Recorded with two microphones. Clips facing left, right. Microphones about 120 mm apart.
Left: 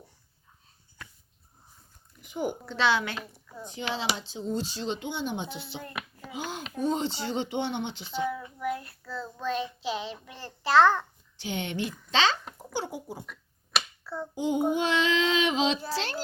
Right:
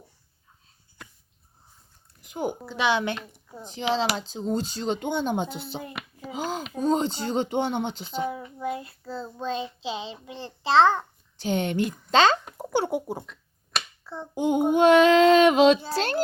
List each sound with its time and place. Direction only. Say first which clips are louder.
2.5 s a woman's voice: right 1 dB; 15° right (ahead or behind)
3.6 s speech: right 7 dB; 35° right (ahead or behind)
4.8 s speech: right 5 dB; 50° right (ahead or behind)
8.2 s child singing: right 1 dB; 20° right (ahead or behind)
11.4 s speech: right 7 dB; 45° right (ahead or behind)
12.5 s speech: right 9 dB; 60° right (ahead or behind)
13.2 s finger snapping: left 1 dB; 5° left (ahead or behind)
14.3 s a child's voice: right 5 dB; 60° right (ahead or behind)